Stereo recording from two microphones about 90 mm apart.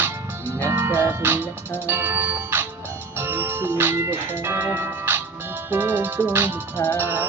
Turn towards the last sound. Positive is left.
turn(degrees=-25)  # may be behind; listen again after turning